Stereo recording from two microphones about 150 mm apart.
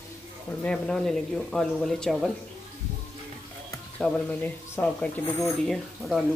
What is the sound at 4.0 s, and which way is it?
Speech, 5° left (ahead or behind).